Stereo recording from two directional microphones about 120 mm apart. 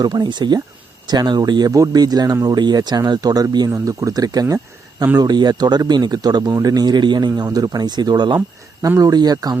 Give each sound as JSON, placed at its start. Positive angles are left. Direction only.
{"t": 0.0, "sound": "speech", "side_deg": -40}